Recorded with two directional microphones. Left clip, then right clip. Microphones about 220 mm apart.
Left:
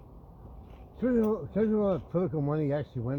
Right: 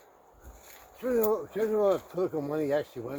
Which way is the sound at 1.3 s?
35° right (ahead or behind).